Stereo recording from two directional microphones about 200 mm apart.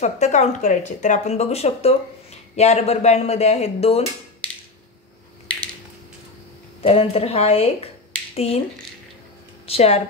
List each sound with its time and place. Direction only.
0.0 s speech: 35° left (ahead or behind)
6.8 s speech: 30° left (ahead or behind)
9.7 s speech: 30° left (ahead or behind)